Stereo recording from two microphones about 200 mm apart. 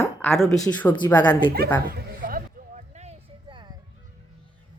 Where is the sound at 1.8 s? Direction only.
45° right (ahead or behind); by 3.8 s 25° right (ahead or behind).